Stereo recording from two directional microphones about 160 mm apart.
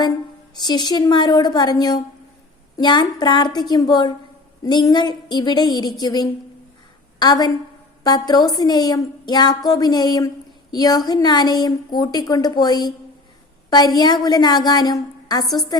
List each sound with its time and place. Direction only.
0.5 s a woman's voice: 25° left (ahead or behind)